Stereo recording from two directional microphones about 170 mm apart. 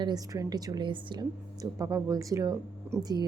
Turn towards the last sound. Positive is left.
turn(degrees=-25)  # may be behind; listen again after turning